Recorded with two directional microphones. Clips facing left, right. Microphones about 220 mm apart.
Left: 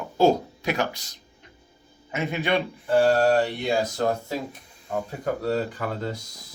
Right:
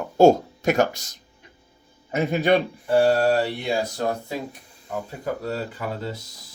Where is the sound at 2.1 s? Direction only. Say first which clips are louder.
Right 6 dB; 40° right (ahead or behind).